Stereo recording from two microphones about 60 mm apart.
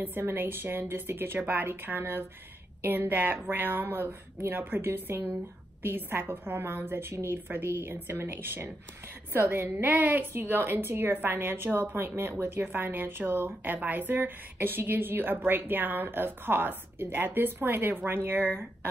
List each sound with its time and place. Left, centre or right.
0.0 s a woman's voice: right